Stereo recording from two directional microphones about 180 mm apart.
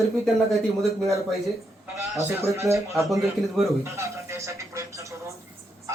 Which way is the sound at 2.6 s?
15° right (ahead or behind).